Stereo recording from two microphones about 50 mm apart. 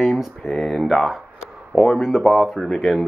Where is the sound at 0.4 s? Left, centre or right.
Centre.